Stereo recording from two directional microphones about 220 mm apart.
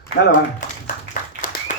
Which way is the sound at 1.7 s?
35° left (ahead or behind).